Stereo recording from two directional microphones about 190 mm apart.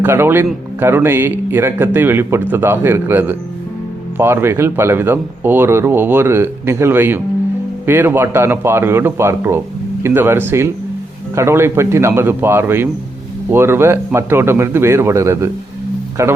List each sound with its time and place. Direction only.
0.0 s speech: 10° right (ahead or behind)